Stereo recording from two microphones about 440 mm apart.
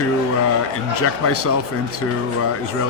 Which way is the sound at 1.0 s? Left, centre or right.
Left.